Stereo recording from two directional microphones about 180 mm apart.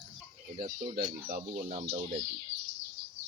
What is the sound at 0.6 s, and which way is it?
Speech, 55° right (ahead or behind).